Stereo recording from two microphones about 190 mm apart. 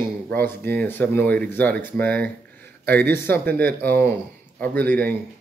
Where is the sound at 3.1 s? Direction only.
10° left (ahead or behind).